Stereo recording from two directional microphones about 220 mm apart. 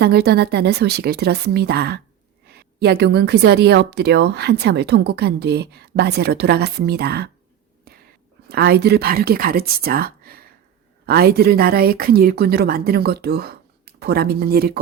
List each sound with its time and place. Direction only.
0.0 s a woman's voice: 45° right (ahead or behind)
7.9 s whispering: 45° right (ahead or behind)
8.4 s a woman's voice: 45° right (ahead or behind)